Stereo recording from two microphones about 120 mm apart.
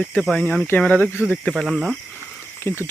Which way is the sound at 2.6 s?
20° left (ahead or behind).